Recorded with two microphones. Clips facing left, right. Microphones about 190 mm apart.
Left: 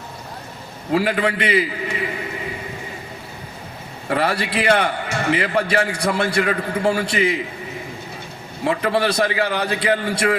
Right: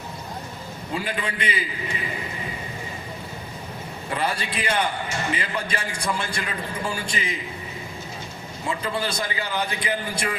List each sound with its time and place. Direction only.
0.9 s a man's voice: 75° left (ahead or behind)
4.1 s a man's voice: 70° left (ahead or behind)
8.6 s a man's voice: 70° left (ahead or behind)